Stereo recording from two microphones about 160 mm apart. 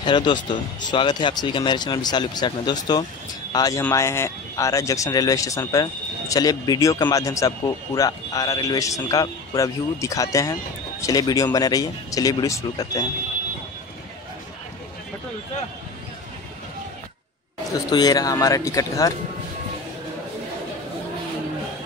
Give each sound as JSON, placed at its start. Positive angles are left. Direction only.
{"t": 0.0, "sound": "speech", "side_deg": 30}
{"t": 17.8, "sound": "speech", "side_deg": 25}